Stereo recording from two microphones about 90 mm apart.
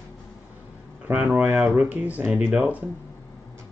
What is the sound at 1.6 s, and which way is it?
Speech, centre (ahead or behind).